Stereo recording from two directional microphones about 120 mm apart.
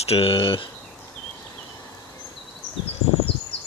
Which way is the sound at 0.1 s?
50° left (ahead or behind).